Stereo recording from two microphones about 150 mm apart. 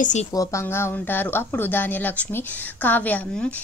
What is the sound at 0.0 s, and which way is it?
Speech, 50° left (ahead or behind).